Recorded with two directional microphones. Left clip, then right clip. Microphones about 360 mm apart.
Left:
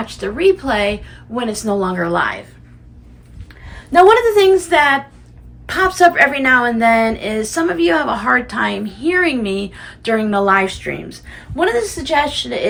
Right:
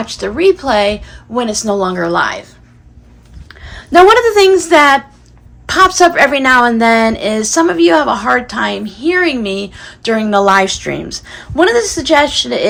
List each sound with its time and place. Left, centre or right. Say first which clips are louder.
0.0 s a woman's voice: right 3 dB; centre
3.5 s a woman's voice: right 4 dB; right